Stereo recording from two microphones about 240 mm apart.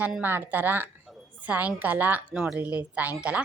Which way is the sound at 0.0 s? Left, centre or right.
Centre.